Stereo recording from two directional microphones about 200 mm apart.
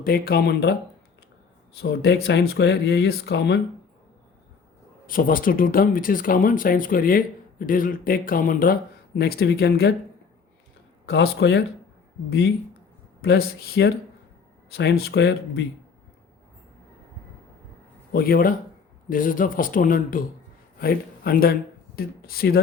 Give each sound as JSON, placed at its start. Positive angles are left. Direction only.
{"t": 0.0, "sound": "speech", "side_deg": 50}
{"t": 1.8, "sound": "speech", "side_deg": 55}
{"t": 5.0, "sound": "speech", "side_deg": 45}
{"t": 11.0, "sound": "speech", "side_deg": 55}
{"t": 13.2, "sound": "speech", "side_deg": 50}
{"t": 18.1, "sound": "speech", "side_deg": 45}